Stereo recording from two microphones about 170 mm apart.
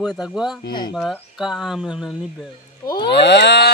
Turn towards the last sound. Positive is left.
turn(degrees=90)